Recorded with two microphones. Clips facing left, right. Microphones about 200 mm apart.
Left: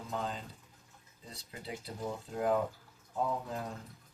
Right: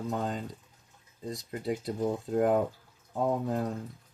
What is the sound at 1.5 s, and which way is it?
Speech, 45° right (ahead or behind).